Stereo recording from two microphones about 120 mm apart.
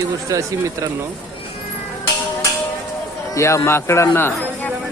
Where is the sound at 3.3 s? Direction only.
25° left (ahead or behind).